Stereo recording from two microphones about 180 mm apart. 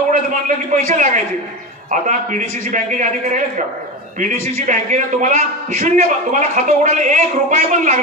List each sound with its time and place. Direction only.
0.1 s a man's voice: 45° right (ahead or behind)